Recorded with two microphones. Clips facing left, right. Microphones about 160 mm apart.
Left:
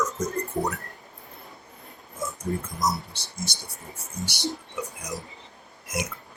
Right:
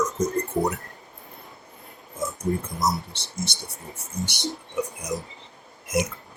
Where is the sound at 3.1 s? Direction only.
25° right (ahead or behind).